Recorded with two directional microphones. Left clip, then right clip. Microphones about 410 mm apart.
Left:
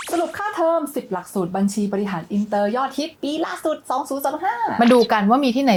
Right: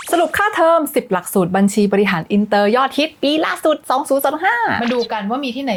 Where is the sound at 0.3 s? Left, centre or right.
Right.